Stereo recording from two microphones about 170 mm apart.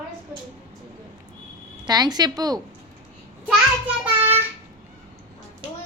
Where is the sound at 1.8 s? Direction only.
25° right (ahead or behind).